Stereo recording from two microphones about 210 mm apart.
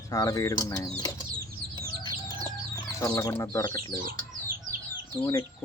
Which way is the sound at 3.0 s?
15° left (ahead or behind).